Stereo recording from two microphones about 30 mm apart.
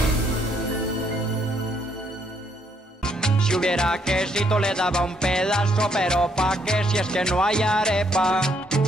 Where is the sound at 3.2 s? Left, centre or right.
Left.